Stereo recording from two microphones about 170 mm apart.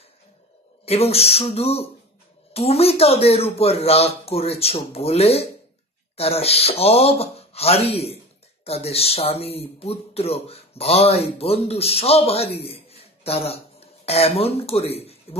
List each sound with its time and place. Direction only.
0.8 s speech: 35° left (ahead or behind)